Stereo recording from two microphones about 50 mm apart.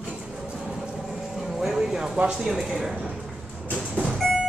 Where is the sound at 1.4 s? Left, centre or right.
Centre.